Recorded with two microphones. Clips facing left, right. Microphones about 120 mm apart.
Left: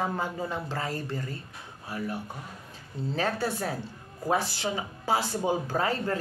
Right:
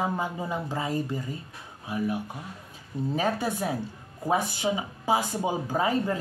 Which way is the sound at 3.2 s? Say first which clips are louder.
Right 1 dB; 15° right (ahead or behind).